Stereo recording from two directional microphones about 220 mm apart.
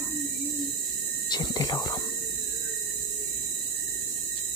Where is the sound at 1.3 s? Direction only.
20° left (ahead or behind).